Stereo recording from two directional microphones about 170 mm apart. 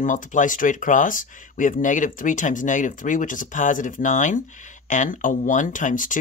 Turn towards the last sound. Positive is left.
turn(degrees=50)  # may be behind; listen again after turning